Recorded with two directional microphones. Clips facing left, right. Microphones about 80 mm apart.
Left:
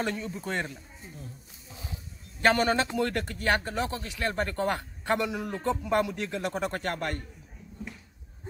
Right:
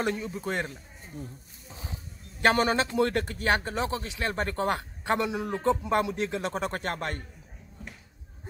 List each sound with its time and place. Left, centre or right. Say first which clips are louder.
0.0 s a man's voice: right 2 dB; centre
0.3 s a man's voice: right 1 dB; centre
2.4 s speech: even; right